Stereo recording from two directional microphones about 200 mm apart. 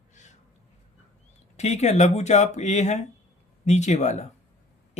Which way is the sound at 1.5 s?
35° left (ahead or behind).